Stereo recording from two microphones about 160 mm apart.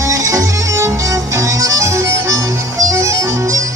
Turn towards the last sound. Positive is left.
turn(degrees=-20)  # may be behind; listen again after turning